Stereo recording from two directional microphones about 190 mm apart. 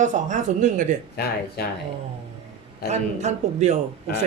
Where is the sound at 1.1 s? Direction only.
60° left (ahead or behind).